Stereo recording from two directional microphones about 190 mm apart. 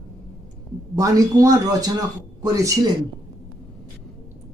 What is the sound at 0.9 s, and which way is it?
Speech, 15° right (ahead or behind).